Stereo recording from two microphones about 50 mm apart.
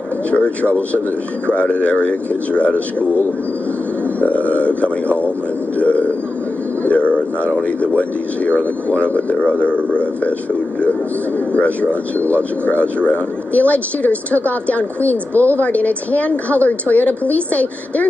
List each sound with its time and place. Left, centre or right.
0.3 s speech: left
4.2 s speech: left
6.8 s bird: left
7.6 s speech: left
10.8 s a woman's voice: left